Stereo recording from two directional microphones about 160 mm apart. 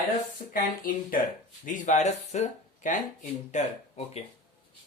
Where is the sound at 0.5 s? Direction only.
60° left (ahead or behind); by 4.2 s 40° left (ahead or behind).